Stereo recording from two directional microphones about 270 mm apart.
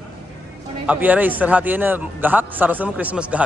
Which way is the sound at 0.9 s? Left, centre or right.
Centre.